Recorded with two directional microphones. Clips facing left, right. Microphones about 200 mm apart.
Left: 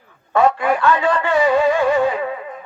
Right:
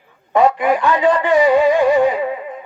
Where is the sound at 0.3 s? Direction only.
15° right (ahead or behind).